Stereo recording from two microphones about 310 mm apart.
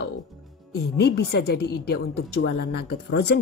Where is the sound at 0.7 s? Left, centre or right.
Left.